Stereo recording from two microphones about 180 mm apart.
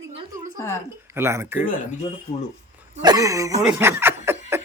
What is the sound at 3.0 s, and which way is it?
Speech, 20° right (ahead or behind).